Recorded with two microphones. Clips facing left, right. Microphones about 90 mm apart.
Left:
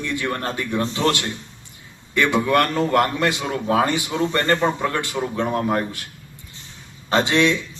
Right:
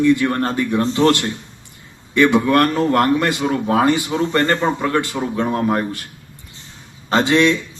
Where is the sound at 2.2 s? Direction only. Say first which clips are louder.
Right 4 dB; centre (ahead or behind).